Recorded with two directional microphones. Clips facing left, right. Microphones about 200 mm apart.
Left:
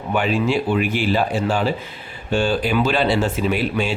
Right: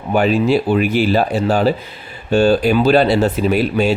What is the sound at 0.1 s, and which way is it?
Speech, 40° right (ahead or behind).